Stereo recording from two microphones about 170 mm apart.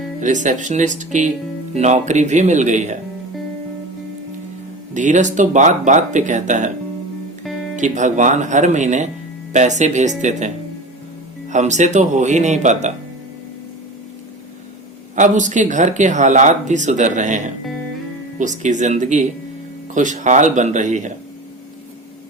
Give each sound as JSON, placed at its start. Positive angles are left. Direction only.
{"t": 0.2, "sound": "speech", "side_deg": -45}
{"t": 4.9, "sound": "speech", "side_deg": -45}
{"t": 7.8, "sound": "speech", "side_deg": -45}
{"t": 15.1, "sound": "speech", "side_deg": -45}